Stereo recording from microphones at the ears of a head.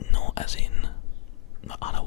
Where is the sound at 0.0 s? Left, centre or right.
Left.